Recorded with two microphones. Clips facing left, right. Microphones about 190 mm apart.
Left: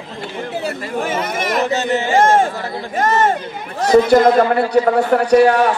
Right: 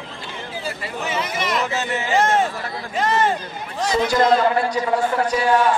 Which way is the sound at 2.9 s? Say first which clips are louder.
Left 4 dB; 50° left (ahead or behind).